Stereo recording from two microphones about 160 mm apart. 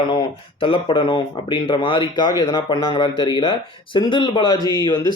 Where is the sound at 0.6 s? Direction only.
35° left (ahead or behind).